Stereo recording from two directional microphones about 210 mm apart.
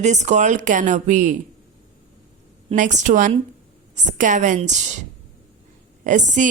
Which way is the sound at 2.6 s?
35° right (ahead or behind).